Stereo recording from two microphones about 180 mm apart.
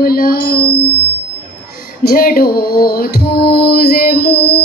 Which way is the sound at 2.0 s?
55° left (ahead or behind).